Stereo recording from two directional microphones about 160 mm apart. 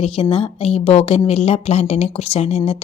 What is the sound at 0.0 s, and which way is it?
A woman's voice, 35° left (ahead or behind).